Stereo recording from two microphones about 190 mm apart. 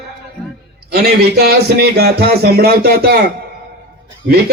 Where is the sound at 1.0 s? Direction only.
55° right (ahead or behind).